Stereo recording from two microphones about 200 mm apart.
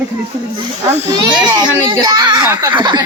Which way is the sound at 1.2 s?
20° right (ahead or behind).